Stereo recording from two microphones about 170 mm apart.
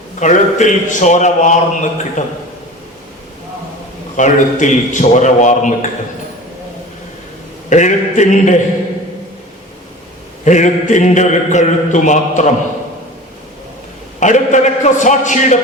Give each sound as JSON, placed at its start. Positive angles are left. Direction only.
{"t": 0.2, "sound": "a man's voice", "side_deg": 45}
{"t": 4.2, "sound": "a man's voice", "side_deg": 45}
{"t": 7.7, "sound": "a man's voice", "side_deg": 45}
{"t": 10.4, "sound": "a man's voice", "side_deg": 45}
{"t": 14.2, "sound": "a man's voice", "side_deg": 45}